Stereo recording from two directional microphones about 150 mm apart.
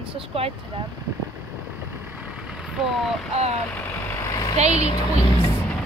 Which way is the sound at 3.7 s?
15° left (ahead or behind).